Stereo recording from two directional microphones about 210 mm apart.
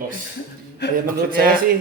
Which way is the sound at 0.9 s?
45° right (ahead or behind).